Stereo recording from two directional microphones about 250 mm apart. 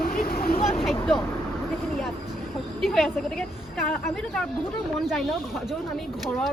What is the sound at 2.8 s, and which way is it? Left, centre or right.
Speech, centre.